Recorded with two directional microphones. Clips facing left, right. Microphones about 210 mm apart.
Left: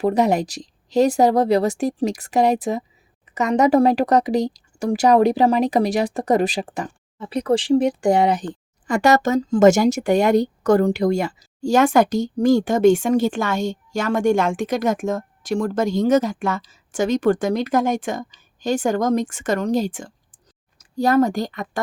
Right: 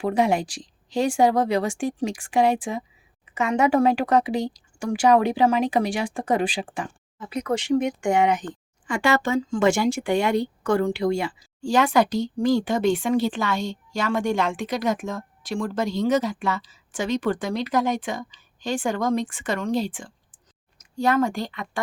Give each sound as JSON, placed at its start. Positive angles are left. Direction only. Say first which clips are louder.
{"t": 0.0, "sound": "speech", "louder": "left 4 dB", "side_deg": 40}